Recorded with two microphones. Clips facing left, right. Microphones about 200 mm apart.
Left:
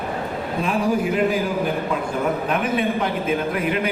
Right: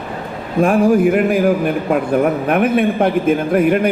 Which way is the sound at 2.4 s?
60° right (ahead or behind).